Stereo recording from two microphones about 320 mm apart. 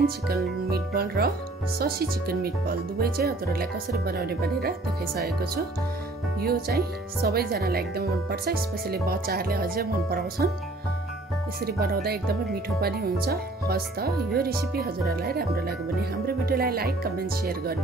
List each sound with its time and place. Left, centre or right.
0.7 s speech: right
11.6 s speech: right